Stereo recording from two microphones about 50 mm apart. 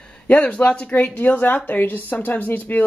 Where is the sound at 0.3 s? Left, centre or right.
Left.